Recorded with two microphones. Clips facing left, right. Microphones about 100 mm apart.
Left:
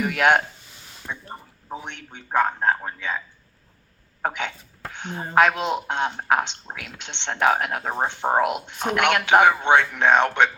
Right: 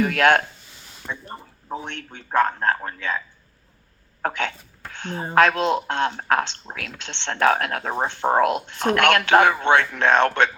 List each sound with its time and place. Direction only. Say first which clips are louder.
0.0 s a man's voice: right 2 dB; 15° left (ahead or behind)
1.8 s a man's voice: right 3 dB; 15° left (ahead or behind)
4.2 s a man's voice: right 2 dB; 15° left (ahead or behind)